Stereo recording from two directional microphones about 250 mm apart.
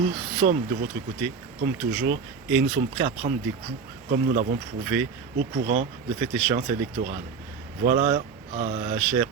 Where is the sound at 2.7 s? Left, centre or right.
Right.